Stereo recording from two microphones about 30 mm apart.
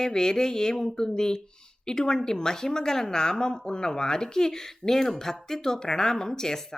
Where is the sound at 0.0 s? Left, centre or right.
Left.